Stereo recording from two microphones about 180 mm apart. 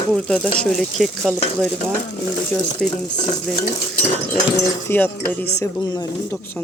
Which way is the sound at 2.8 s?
5° left (ahead or behind).